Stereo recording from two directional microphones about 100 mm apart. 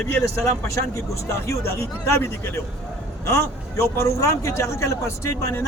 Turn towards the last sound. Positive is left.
turn(degrees=25)  # may be behind; listen again after turning